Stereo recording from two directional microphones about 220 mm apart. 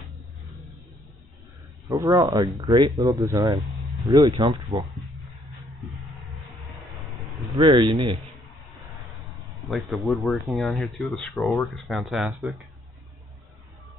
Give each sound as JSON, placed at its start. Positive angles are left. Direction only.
{"t": 1.9, "sound": "speech", "side_deg": -15}
{"t": 7.5, "sound": "speech", "side_deg": -20}
{"t": 9.7, "sound": "speech", "side_deg": 0}